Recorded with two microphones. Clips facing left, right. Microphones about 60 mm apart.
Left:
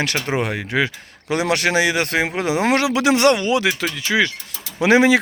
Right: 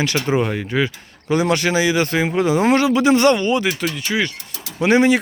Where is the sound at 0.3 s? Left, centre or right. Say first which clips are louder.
Right 3 dB; left.